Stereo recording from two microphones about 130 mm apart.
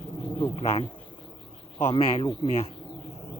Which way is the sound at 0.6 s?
50° left (ahead or behind).